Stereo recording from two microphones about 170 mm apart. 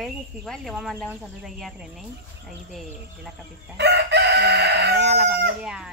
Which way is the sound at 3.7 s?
80° right.